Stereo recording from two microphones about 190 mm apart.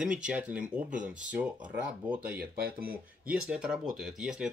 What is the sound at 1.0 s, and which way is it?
Speech, 40° right (ahead or behind).